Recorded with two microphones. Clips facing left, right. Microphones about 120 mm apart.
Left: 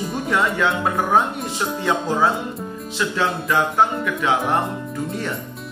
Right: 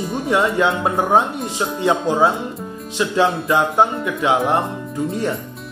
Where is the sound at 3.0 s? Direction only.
20° right (ahead or behind).